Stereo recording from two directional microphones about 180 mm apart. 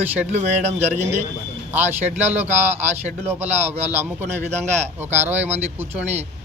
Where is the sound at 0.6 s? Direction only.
40° right (ahead or behind).